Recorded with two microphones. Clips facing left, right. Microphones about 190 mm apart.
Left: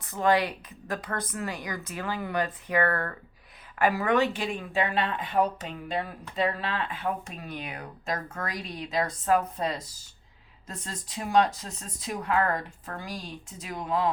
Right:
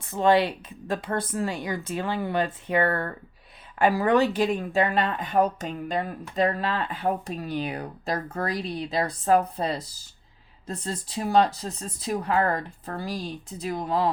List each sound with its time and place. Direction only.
0.0 s speech: 25° right (ahead or behind)